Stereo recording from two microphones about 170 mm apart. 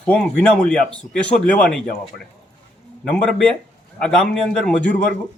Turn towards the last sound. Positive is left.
turn(degrees=5)  # may be behind; listen again after turning